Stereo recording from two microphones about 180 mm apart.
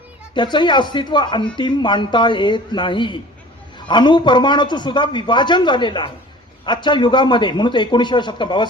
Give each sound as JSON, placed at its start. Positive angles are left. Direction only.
{"t": 0.3, "sound": "a man's voice", "side_deg": 25}